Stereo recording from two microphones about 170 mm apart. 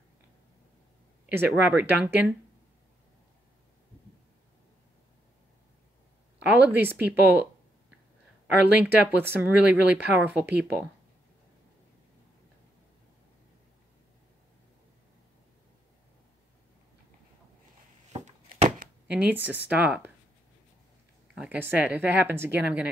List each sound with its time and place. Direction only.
1.2 s a sound: 10° right (ahead or behind)
1.7 s speech: 5° right (ahead or behind)
6.4 s speech: 10° right (ahead or behind)
8.7 s speech: 10° right (ahead or behind)
18.2 s a sound: 45° right (ahead or behind)
19.1 s speech: 10° right (ahead or behind)
21.4 s speech: 10° right (ahead or behind)